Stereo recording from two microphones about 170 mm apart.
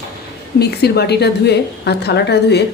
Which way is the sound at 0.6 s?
70° left (ahead or behind).